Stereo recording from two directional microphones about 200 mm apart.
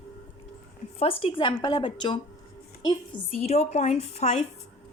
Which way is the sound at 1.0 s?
30° left (ahead or behind).